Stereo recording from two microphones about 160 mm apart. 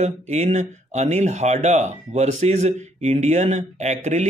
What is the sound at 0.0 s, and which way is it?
Speech, 45° right (ahead or behind).